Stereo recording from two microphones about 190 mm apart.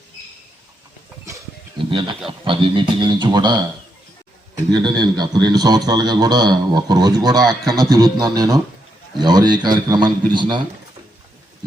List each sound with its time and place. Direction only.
1.3 s a sound: 15° right (ahead or behind)
1.9 s a man's voice: 25° right (ahead or behind)
4.7 s a man's voice: 20° right (ahead or behind)
7.4 s speech: centre (ahead or behind)
7.8 s music: 15° right (ahead or behind)
8.2 s a man's voice: 20° right (ahead or behind)